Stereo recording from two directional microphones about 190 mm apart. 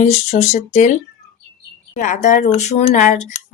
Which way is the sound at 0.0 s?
35° left (ahead or behind).